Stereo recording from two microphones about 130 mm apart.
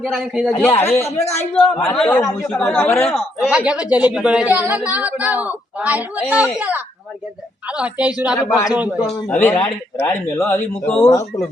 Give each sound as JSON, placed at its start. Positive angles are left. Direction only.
{"t": 0.0, "sound": "a man's voice", "side_deg": -5}
{"t": 0.6, "sound": "a man's voice", "side_deg": 15}
{"t": 1.2, "sound": "speech", "side_deg": 55}
{"t": 1.6, "sound": "a man's voice", "side_deg": 5}
{"t": 3.4, "sound": "a woman's voice", "side_deg": -10}
{"t": 8.4, "sound": "a man's voice", "side_deg": 25}
{"t": 8.7, "sound": "a woman's voice", "side_deg": -10}
{"t": 9.0, "sound": "a man's voice", "side_deg": 5}
{"t": 9.4, "sound": "a man's voice", "side_deg": 15}
{"t": 10.8, "sound": "a man's voice", "side_deg": 5}